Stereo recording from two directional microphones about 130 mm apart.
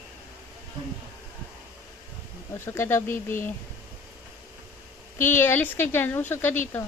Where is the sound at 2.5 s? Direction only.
20° left (ahead or behind).